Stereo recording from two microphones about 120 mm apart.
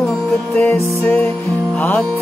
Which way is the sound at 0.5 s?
20° left (ahead or behind).